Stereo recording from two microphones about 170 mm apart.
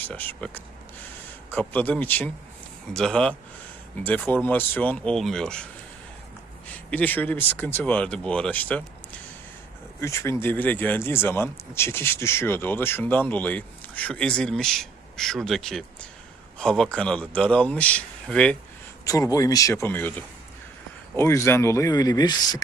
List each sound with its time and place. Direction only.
0.0 s speech: 10° left (ahead or behind)
6.9 s speech: 10° left (ahead or behind)
10.0 s speech: 15° left (ahead or behind)
19.0 s speech: 20° left (ahead or behind)